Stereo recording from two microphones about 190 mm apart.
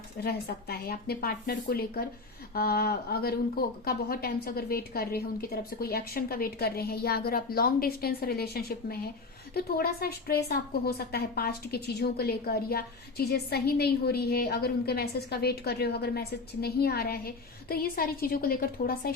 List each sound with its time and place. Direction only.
0.2 s a woman's voice: 60° left (ahead or behind)